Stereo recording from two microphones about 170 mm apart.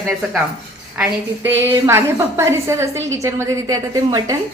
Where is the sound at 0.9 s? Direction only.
15° right (ahead or behind).